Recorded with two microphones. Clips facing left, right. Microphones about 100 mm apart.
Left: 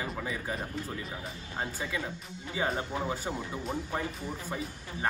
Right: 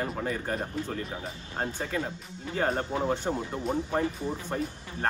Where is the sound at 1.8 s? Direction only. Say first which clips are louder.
Right 4 dB; 55° right (ahead or behind).